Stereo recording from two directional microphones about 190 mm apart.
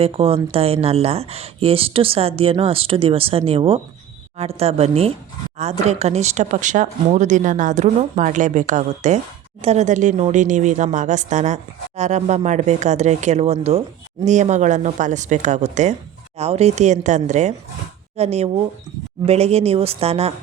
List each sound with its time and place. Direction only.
0.0 s speech: 30° right (ahead or behind)